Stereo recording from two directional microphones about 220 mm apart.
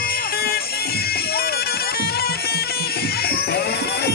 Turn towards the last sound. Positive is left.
turn(degrees=45)  # may be behind; listen again after turning